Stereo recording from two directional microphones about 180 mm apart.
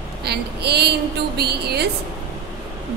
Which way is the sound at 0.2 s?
65° right (ahead or behind).